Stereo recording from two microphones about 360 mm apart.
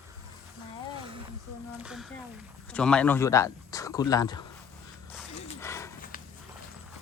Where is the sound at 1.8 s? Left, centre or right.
Centre.